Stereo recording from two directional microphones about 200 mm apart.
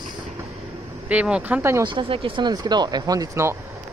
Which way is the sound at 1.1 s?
5° right (ahead or behind).